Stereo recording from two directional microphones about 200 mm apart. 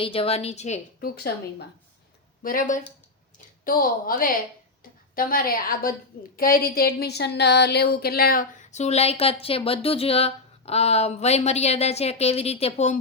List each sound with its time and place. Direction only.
0.0 s speech: 30° left (ahead or behind)
1.1 s a woman's voice: 50° left (ahead or behind); by 13.0 s 35° left (ahead or behind)